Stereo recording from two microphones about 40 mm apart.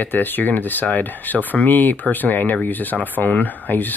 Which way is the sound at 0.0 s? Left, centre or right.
Left.